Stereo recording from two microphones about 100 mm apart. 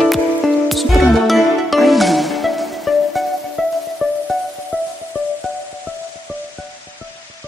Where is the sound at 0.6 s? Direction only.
Centre (ahead or behind).